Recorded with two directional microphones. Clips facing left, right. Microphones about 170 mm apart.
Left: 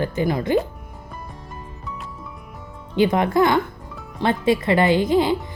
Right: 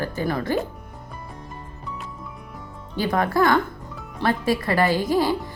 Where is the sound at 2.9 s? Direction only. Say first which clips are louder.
Left 4 dB; 20° left (ahead or behind).